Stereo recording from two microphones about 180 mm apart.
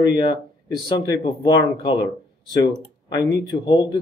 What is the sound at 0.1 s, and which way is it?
Speech, 25° left (ahead or behind).